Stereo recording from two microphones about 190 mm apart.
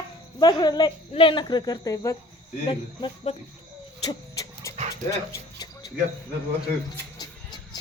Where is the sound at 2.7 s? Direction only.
30° left (ahead or behind).